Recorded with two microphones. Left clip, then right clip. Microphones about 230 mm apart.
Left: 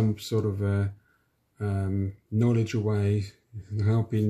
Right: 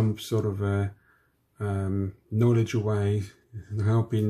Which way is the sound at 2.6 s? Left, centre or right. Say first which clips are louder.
Right 1 dB; centre.